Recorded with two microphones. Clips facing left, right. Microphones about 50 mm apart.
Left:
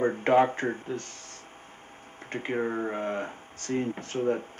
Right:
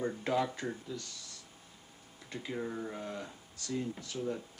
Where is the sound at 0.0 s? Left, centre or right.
Left.